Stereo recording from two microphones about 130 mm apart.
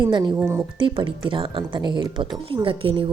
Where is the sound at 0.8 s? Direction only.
40° right (ahead or behind).